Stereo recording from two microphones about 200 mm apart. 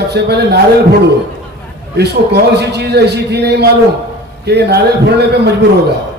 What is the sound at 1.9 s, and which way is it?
A man's voice, 55° right (ahead or behind).